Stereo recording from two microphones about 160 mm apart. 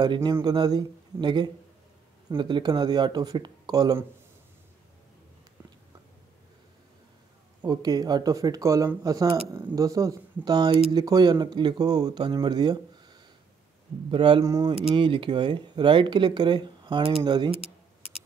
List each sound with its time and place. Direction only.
0.0 s speech: 25° right (ahead or behind)
7.6 s speech: 25° right (ahead or behind)
14.4 s speech: 20° right (ahead or behind)
15.0 s speech: 30° right (ahead or behind)